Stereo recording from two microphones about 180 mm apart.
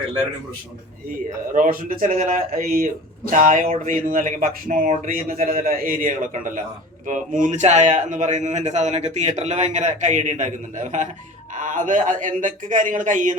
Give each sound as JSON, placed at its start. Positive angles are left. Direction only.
{"t": 1.5, "sound": "a man's voice", "side_deg": -50}